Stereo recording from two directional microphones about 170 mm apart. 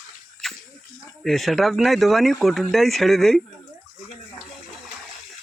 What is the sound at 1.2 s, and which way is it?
Speech, centre (ahead or behind).